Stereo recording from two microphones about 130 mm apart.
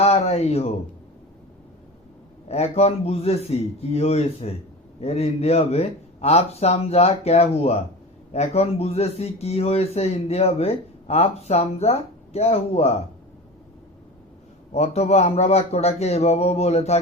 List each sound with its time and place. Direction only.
0.0 s a sound: 55° left (ahead or behind)
2.5 s speech: 55° left (ahead or behind)
14.7 s a man's voice: 55° left (ahead or behind)